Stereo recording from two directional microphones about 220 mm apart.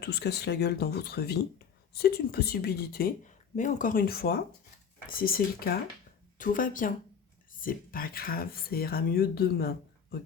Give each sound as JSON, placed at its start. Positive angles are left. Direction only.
{"t": 0.0, "sound": "speech", "side_deg": 50}